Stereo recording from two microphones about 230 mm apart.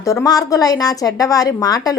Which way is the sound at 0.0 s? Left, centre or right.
Centre.